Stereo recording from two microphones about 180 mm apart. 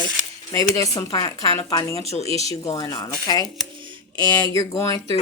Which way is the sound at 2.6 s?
20° left (ahead or behind).